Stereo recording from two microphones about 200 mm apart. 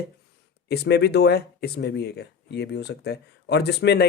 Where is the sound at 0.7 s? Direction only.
55° left (ahead or behind).